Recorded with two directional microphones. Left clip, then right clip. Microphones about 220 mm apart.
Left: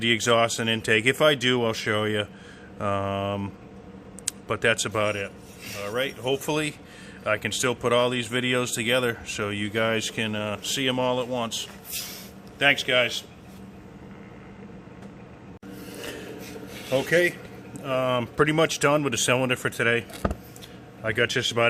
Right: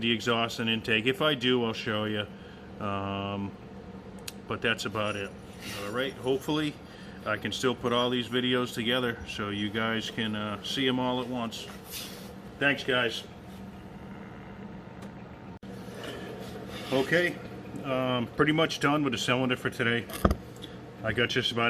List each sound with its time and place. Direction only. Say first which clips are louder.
0.0 s a man's voice: left 7 dB; 55° left (ahead or behind)
12.5 s a man's voice: left 6 dB; 35° left (ahead or behind)
16.9 s speech: left 4 dB; 55° left (ahead or behind)